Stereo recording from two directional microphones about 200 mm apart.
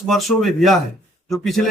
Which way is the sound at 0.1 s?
Centre (ahead or behind).